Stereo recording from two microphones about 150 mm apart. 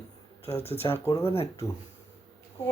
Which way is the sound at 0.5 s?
40° left (ahead or behind).